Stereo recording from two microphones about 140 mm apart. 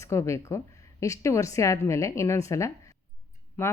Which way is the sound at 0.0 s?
20° left (ahead or behind).